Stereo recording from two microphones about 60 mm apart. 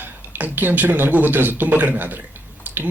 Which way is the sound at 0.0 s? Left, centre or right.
Right.